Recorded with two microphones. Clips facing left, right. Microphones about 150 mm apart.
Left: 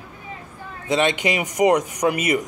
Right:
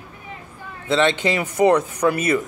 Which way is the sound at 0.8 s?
15° left (ahead or behind).